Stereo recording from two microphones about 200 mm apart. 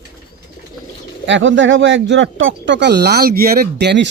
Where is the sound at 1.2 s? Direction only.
65° right (ahead or behind).